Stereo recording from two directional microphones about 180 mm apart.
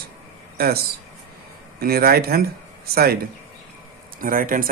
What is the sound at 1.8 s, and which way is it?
Speech, 55° right (ahead or behind).